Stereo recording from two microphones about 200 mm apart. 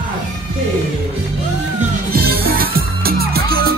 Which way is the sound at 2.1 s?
50° right (ahead or behind).